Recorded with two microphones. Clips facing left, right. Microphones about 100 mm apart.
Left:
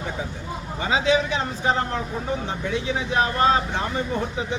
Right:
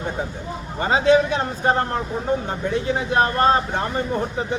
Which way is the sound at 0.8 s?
50° right (ahead or behind).